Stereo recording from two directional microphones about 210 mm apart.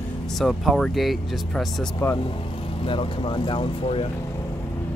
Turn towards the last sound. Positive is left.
turn(degrees=25)  # may be behind; listen again after turning